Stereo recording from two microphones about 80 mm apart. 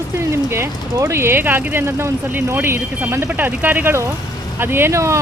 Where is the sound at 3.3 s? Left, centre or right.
Centre; by 5.2 s right.